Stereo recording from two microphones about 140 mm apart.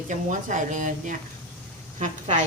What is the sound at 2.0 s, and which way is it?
Speech, 55° right (ahead or behind).